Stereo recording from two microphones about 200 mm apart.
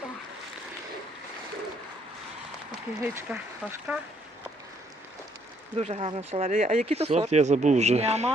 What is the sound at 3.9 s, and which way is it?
Speech, 5° right (ahead or behind).